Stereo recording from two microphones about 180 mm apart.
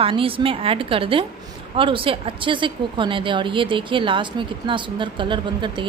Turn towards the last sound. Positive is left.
turn(degrees=-25)  # may be behind; listen again after turning